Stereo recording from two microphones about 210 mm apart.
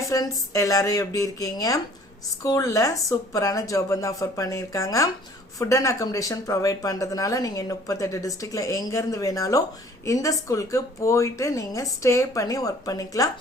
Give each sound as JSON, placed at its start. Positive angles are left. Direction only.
{"t": 0.0, "sound": "speech", "side_deg": 15}